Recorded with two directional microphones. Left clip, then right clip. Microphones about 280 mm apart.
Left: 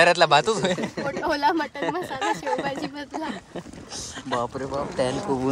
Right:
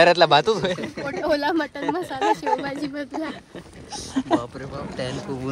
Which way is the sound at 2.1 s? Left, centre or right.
Centre.